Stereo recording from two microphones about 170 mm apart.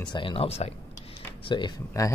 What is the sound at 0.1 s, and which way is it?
Speech, 30° left (ahead or behind).